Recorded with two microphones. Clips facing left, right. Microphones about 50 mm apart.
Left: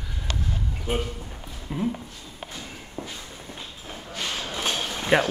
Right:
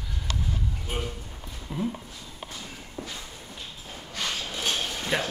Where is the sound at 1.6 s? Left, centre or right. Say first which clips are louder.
Left 3 dB; centre.